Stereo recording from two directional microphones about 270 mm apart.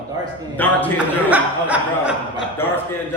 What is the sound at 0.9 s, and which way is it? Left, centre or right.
Speech, centre.